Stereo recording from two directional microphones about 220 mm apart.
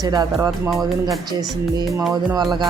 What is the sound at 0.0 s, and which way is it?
A woman's voice, 15° right (ahead or behind).